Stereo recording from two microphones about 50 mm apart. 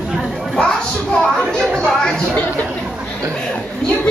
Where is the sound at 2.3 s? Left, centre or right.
Left.